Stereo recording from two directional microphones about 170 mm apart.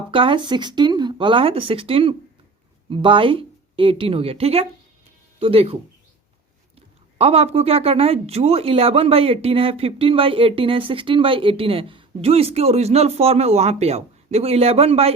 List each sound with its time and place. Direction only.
0.1 s speech: 30° right (ahead or behind)
6.7 s speech: 35° right (ahead or behind)